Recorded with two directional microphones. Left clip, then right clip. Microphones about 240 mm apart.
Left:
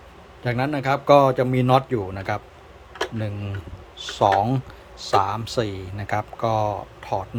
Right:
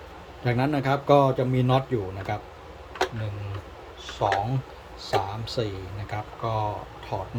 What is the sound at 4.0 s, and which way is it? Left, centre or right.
Speech, left.